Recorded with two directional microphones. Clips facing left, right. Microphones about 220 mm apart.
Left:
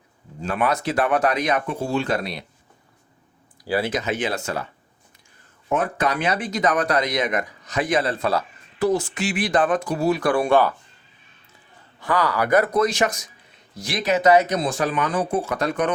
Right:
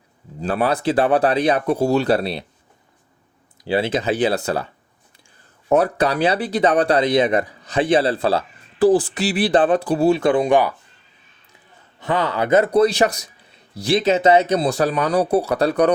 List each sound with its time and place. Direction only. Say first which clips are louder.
0.4 s speech: right 4 dB; 35° right (ahead or behind)
3.6 s speech: right 3 dB; 25° right (ahead or behind)
5.6 s speech: right 6 dB; 35° right (ahead or behind); by 10.8 s 15° right (ahead or behind)
11.9 s a man's voice: right 1 dB; 25° right (ahead or behind)